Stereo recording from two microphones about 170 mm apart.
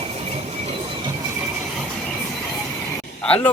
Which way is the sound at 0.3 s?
35° right (ahead or behind).